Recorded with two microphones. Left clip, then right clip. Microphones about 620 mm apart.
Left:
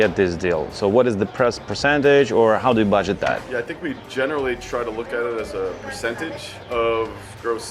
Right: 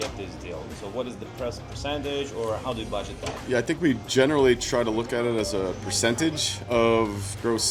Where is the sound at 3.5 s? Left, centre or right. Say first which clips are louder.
Right 2 dB; right.